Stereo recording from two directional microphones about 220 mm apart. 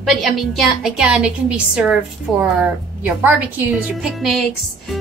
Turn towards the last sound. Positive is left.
turn(degrees=0)  # may be behind; listen again after turning